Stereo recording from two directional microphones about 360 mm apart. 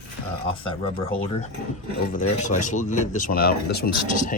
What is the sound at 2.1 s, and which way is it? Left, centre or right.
Speech, left.